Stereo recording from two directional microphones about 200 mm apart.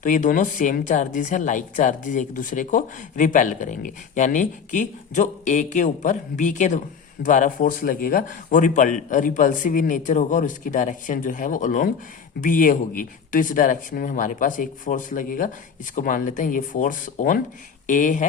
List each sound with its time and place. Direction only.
0.0 s speech: 40° left (ahead or behind)